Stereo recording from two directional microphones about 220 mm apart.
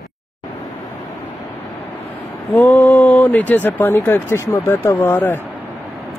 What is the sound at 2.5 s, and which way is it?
Speech, 10° left (ahead or behind).